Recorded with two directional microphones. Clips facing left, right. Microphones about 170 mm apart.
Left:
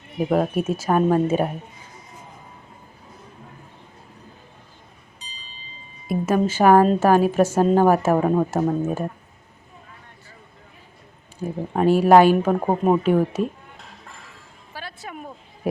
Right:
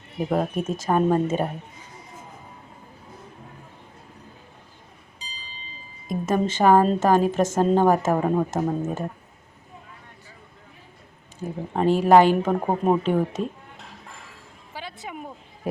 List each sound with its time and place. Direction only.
0.2 s a woman's voice: 10° left (ahead or behind)
6.1 s a woman's voice: 5° left (ahead or behind)
11.3 s a woman's voice: 10° left (ahead or behind)
14.7 s music: 15° right (ahead or behind)